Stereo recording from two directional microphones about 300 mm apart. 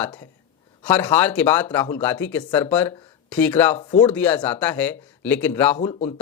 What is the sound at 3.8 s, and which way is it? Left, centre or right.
Speech, centre.